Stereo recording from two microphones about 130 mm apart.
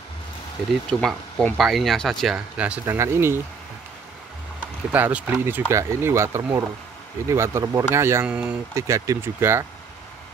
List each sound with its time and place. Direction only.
0.8 s speech: 5° left (ahead or behind)
2.9 s speech: 20° right (ahead or behind)
4.9 s speech: 15° right (ahead or behind)
8.3 s speech: 10° right (ahead or behind)
8.7 s speech: 25° right (ahead or behind)